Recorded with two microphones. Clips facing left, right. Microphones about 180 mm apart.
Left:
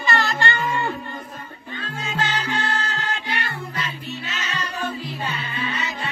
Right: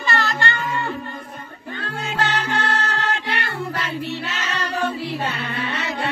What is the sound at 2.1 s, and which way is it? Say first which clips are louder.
Music: right 2 dB; 70° right (ahead or behind).